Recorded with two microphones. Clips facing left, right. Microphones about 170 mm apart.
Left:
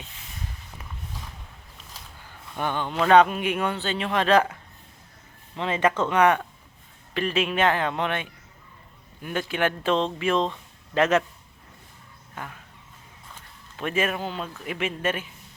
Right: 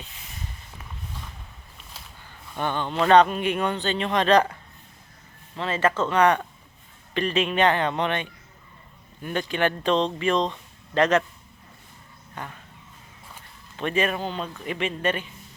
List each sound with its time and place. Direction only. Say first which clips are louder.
2.6 s a man's voice: right 1 dB; 10° left (ahead or behind)
5.5 s a man's voice: even; 15° left (ahead or behind)
12.3 s speech: right 1 dB; 5° left (ahead or behind)
13.7 s speech: right 1 dB; 5° left (ahead or behind)